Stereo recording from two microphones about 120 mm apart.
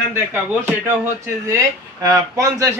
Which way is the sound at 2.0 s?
30° right (ahead or behind).